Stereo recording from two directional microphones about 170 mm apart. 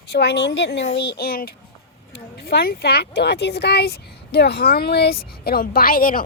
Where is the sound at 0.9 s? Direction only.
75° left (ahead or behind).